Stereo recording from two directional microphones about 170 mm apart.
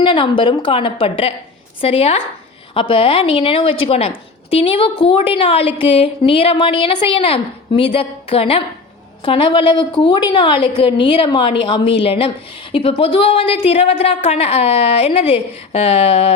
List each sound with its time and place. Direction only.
0.0 s a woman's voice: 30° left (ahead or behind)